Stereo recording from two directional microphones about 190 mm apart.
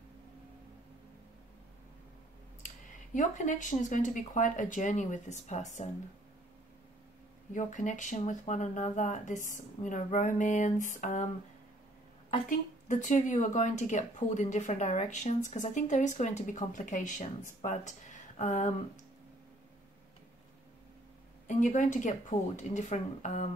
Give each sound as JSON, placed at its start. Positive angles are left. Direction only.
{"t": 3.2, "sound": "speech", "side_deg": 40}
{"t": 7.5, "sound": "speech", "side_deg": 40}
{"t": 12.4, "sound": "speech", "side_deg": 40}
{"t": 21.5, "sound": "speech", "side_deg": 40}